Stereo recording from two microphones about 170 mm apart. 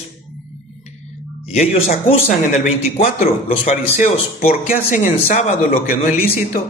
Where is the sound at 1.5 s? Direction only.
45° left (ahead or behind).